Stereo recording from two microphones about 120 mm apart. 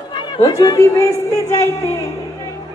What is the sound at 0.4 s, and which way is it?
Speech, 25° left (ahead or behind).